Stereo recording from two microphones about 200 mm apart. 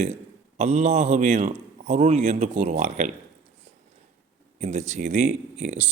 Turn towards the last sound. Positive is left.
turn(degrees=-35)  # may be behind; listen again after turning